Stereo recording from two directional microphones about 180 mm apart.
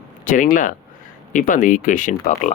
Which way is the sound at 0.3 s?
45° left (ahead or behind).